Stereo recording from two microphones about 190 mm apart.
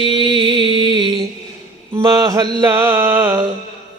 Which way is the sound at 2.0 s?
20° right (ahead or behind).